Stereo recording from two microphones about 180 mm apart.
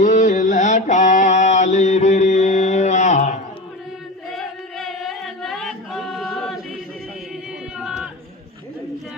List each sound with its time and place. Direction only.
0.0 s mantra: 45° left (ahead or behind)
4.3 s singing: centre (ahead or behind)
7.8 s music: 5° right (ahead or behind)